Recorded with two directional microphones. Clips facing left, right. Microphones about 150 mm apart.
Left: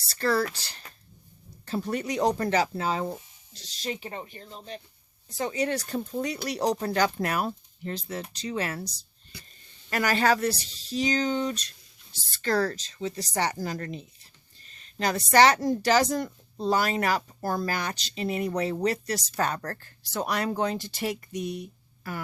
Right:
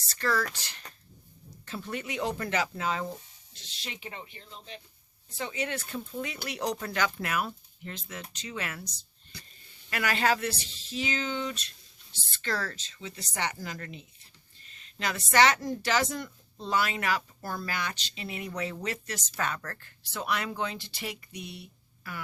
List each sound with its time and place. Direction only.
0.0 s speech: 35° left (ahead or behind)